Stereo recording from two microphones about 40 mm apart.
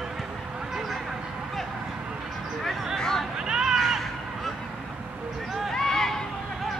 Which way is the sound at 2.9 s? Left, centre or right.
Centre.